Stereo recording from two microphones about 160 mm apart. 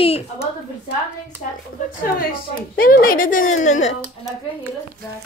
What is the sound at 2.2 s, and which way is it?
A woman's voice, 65° left (ahead or behind).